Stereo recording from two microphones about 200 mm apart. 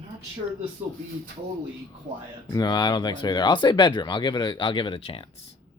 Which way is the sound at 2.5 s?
20° left (ahead or behind).